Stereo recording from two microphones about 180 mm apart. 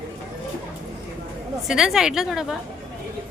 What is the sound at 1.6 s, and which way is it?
Speech, 5° right (ahead or behind).